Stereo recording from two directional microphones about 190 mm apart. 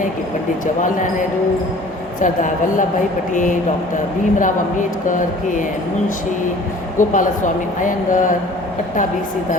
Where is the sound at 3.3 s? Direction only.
45° left (ahead or behind).